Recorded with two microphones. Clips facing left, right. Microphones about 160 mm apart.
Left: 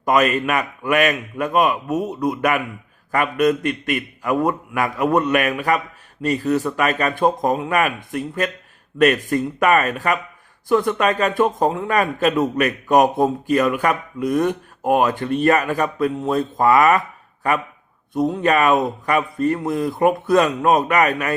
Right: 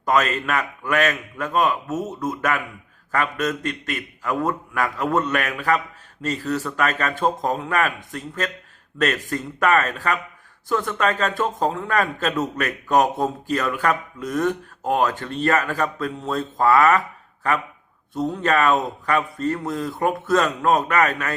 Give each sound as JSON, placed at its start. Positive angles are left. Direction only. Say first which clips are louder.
{"t": 0.0, "sound": "a man's voice", "louder": "left 3 dB", "side_deg": 15}
{"t": 18.1, "sound": "a man's voice", "louder": "left 4 dB", "side_deg": 15}